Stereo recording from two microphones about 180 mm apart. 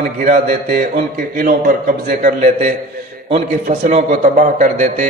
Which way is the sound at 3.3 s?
45° right (ahead or behind).